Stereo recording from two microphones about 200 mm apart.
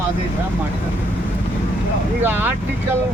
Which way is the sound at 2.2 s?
10° right (ahead or behind).